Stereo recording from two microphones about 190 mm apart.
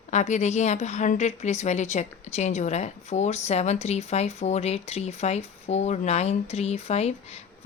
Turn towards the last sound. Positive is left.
turn(degrees=35)  # may be behind; listen again after turning